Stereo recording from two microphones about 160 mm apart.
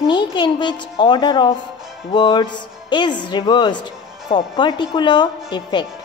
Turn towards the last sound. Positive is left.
turn(degrees=30)  # may be behind; listen again after turning